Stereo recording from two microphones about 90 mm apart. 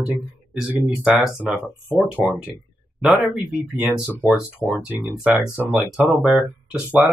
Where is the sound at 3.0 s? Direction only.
5° right (ahead or behind).